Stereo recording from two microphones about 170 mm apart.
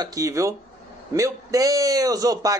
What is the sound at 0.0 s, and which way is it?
A man's voice, 20° right (ahead or behind).